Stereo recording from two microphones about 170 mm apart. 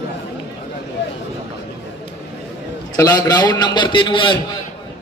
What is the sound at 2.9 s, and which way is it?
A man's voice, 20° left (ahead or behind).